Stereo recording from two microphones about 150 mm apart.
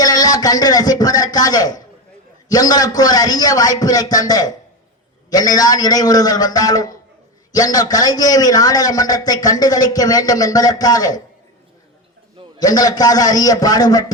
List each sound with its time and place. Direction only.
0.0 s a sound: 25° left (ahead or behind)
2.5 s a man's voice: 25° left (ahead or behind)
12.5 s a man's voice: 25° left (ahead or behind)